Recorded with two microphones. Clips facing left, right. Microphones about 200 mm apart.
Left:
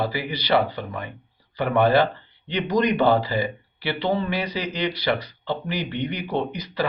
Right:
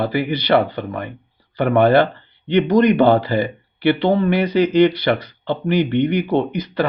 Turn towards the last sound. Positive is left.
turn(degrees=-55)  # may be behind; listen again after turning